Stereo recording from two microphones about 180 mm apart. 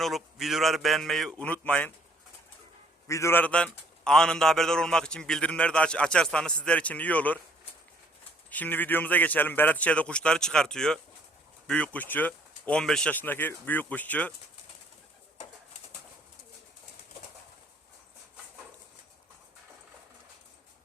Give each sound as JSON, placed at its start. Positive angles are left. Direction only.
{"t": 0.0, "sound": "a man's voice", "side_deg": 0}
{"t": 3.1, "sound": "a man's voice", "side_deg": 15}